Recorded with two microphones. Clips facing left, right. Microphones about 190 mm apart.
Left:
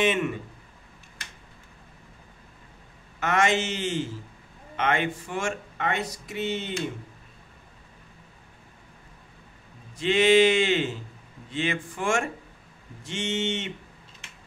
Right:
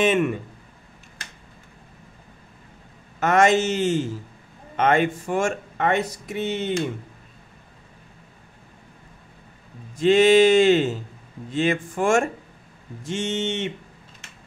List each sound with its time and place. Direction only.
0.0 s speech: 45° right (ahead or behind)
3.2 s speech: 45° right (ahead or behind)
9.9 s speech: 45° right (ahead or behind)